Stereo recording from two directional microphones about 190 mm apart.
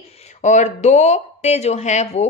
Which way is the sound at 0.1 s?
35° left (ahead or behind).